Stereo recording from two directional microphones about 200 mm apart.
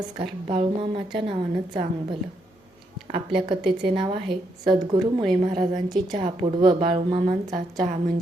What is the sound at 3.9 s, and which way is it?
A woman's voice, 25° right (ahead or behind).